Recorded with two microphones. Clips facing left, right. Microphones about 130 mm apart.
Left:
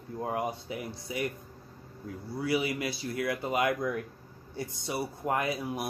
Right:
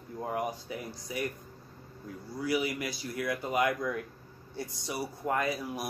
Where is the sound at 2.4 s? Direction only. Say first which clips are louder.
Left 1 dB; 25° left (ahead or behind).